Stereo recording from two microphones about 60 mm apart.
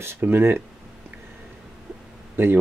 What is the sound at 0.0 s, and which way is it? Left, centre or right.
Speech, right.